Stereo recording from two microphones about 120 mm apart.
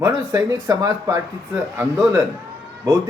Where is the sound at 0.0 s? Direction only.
30° right (ahead or behind).